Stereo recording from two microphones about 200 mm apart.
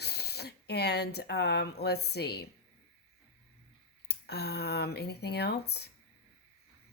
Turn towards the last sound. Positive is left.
turn(degrees=55)  # may be behind; listen again after turning